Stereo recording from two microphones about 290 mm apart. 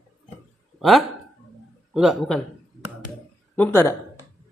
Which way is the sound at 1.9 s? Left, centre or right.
Centre.